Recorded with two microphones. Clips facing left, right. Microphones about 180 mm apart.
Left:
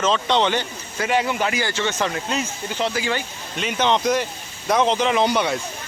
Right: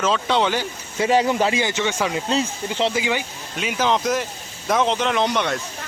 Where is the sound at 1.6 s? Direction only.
15° right (ahead or behind).